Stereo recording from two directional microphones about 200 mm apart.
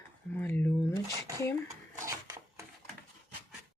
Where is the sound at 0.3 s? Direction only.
10° left (ahead or behind).